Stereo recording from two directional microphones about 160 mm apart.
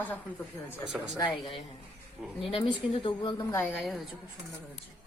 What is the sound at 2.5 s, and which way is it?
Speech, 30° left (ahead or behind).